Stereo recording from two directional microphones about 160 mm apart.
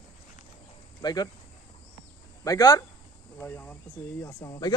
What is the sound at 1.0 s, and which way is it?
Speech, 25° left (ahead or behind).